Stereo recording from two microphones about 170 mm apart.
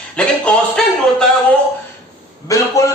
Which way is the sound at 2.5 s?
20° left (ahead or behind).